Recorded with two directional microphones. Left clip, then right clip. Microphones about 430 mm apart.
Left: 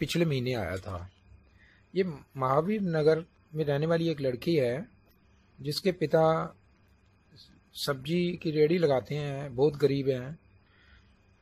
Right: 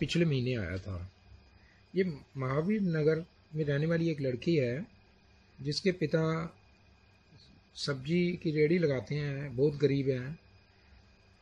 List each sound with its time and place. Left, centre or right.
0.0 s speech: centre
2.0 s speech: centre
4.1 s speech: left
5.6 s speech: centre
7.8 s speech: centre